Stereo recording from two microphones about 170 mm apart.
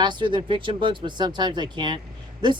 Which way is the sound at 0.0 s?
25° right (ahead or behind).